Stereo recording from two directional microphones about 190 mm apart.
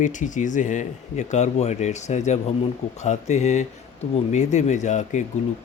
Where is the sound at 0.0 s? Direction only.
40° left (ahead or behind).